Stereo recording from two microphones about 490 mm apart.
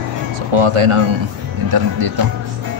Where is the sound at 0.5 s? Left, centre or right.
Right.